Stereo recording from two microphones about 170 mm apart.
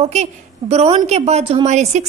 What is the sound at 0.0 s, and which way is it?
A woman's voice, 40° right (ahead or behind).